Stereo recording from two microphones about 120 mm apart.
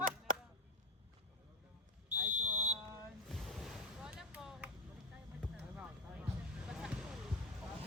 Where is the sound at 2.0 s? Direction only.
15° right (ahead or behind).